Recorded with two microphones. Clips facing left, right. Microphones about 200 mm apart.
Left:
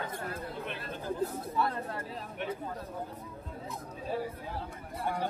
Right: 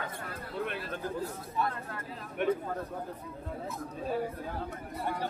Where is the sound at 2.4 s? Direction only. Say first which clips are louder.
Right 8 dB; 55° right (ahead or behind).